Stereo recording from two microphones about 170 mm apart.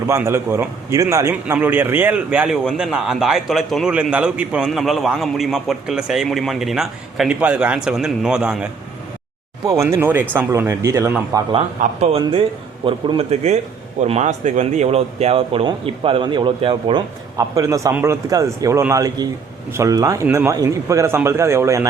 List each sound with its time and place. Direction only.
0.1 s a man's voice: 15° right (ahead or behind)
9.6 s speech: 15° right (ahead or behind)
11.8 s speech: 50° right (ahead or behind)
12.1 s speech: 30° right (ahead or behind)
17.3 s speech: 20° right (ahead or behind)